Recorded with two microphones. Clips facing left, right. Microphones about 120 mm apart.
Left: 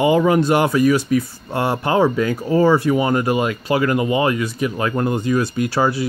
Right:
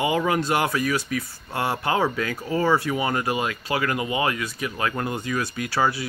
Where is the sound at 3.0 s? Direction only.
35° left (ahead or behind).